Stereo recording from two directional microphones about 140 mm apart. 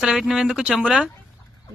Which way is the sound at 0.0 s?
5° right (ahead or behind).